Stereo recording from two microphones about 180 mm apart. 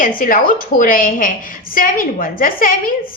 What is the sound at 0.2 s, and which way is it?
A woman's voice, 50° left (ahead or behind).